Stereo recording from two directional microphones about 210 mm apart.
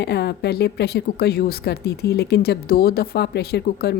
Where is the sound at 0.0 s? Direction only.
50° left (ahead or behind).